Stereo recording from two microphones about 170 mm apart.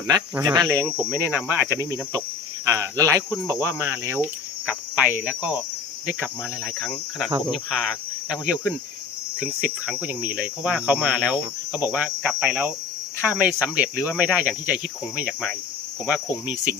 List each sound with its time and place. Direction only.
0.1 s speech: 15° right (ahead or behind)
6.7 s speech: centre (ahead or behind)